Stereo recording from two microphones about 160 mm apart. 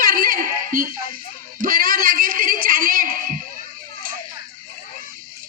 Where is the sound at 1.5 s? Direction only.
60° right (ahead or behind).